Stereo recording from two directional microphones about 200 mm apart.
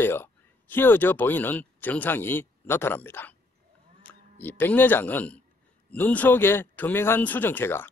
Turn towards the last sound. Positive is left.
turn(degrees=10)  # may be behind; listen again after turning